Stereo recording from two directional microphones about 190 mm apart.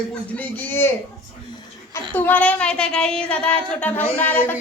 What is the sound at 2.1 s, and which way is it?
Speech, 10° left (ahead or behind).